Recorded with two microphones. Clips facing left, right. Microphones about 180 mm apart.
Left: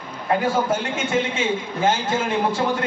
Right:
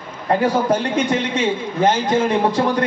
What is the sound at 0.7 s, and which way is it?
A man's voice, 35° right (ahead or behind).